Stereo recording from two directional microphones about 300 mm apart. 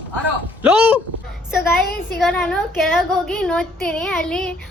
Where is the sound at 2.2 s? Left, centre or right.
Centre.